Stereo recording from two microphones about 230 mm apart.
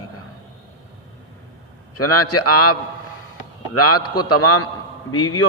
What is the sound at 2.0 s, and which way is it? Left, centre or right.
Speech, left.